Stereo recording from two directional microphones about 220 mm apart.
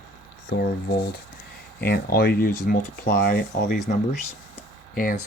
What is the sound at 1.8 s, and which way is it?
Speech, 45° left (ahead or behind).